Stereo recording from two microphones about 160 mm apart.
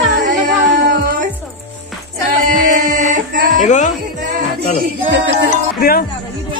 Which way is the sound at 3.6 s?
50° left (ahead or behind).